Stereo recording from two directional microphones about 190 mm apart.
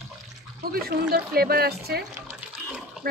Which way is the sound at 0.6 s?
55° right (ahead or behind).